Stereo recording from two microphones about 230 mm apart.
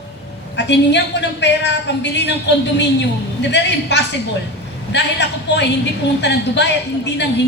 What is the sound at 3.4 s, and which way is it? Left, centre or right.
A woman's voice, left.